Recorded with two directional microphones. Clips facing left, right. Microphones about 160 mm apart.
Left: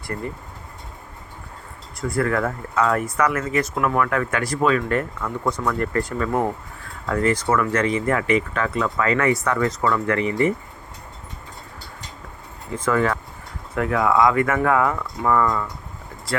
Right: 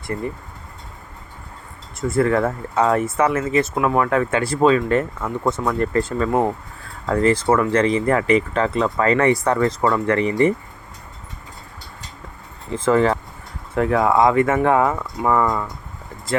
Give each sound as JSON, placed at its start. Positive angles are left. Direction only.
{"t": 0.1, "sound": "speech", "side_deg": -15}
{"t": 2.0, "sound": "speech", "side_deg": -25}
{"t": 12.7, "sound": "speech", "side_deg": -30}